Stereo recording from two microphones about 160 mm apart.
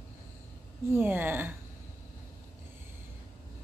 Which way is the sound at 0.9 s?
10° right (ahead or behind).